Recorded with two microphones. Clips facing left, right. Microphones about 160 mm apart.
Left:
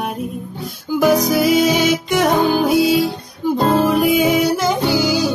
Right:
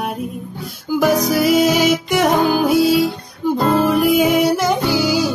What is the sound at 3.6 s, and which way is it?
Music, 25° left (ahead or behind).